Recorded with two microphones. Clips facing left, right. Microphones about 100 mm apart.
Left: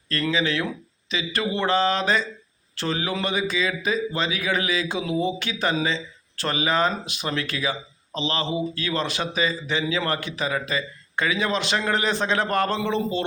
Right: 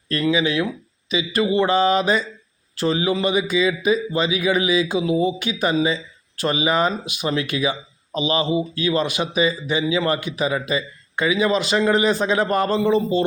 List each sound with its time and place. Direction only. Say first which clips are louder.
0.1 s speech: right 4 dB; 10° right (ahead or behind)